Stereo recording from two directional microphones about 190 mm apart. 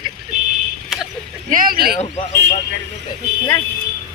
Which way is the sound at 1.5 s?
50° right (ahead or behind).